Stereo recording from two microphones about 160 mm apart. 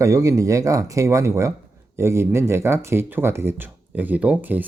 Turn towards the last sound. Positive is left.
turn(degrees=-10)  # may be behind; listen again after turning